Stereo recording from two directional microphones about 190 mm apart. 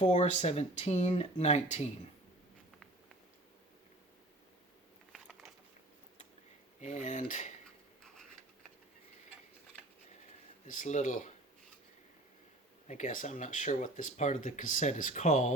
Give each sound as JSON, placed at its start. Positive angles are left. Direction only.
{"t": 0.0, "sound": "speech", "side_deg": 35}
{"t": 5.1, "sound": "biting", "side_deg": 0}
{"t": 6.7, "sound": "speech", "side_deg": 40}
{"t": 10.7, "sound": "speech", "side_deg": 40}
{"t": 12.9, "sound": "speech", "side_deg": 40}